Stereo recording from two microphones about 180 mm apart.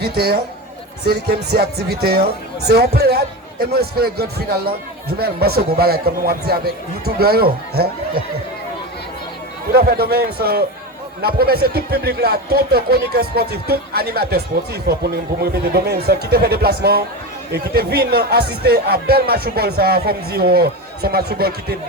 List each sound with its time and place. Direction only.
0.0 s speech: 60° right (ahead or behind)
9.7 s speech: 60° right (ahead or behind)